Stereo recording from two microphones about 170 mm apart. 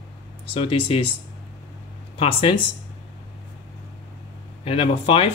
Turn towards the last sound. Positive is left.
turn(degrees=35)  # may be behind; listen again after turning